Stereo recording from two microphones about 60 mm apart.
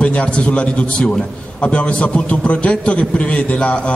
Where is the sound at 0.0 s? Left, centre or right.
Left.